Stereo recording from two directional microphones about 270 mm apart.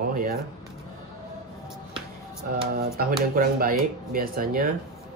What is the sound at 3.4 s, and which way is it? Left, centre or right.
Speech, right.